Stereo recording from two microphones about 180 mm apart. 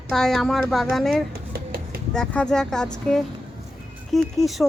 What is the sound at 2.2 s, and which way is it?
Speech, 5° left (ahead or behind).